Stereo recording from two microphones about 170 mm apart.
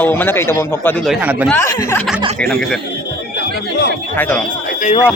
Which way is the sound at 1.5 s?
15° left (ahead or behind).